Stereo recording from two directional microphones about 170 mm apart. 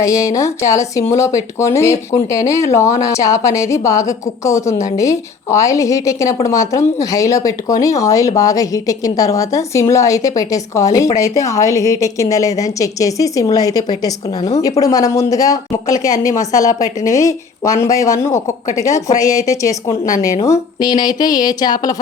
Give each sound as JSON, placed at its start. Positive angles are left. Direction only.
{"t": 0.0, "sound": "a woman's voice", "side_deg": 20}